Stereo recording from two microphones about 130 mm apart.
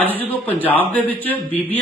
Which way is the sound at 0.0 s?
15° left (ahead or behind).